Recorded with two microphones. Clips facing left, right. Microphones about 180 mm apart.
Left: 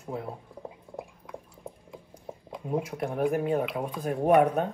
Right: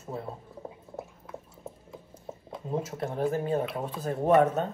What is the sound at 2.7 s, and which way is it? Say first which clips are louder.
Speech: left 2 dB; 15° left (ahead or behind).